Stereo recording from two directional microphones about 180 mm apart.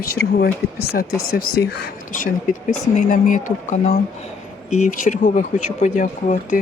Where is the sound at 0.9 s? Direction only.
60° left (ahead or behind).